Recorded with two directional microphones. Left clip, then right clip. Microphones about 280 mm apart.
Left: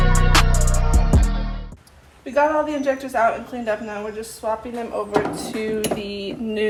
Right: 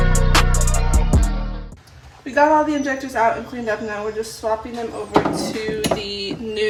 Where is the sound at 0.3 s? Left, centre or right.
Centre.